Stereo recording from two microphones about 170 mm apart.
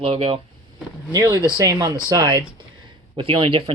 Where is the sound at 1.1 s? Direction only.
20° right (ahead or behind).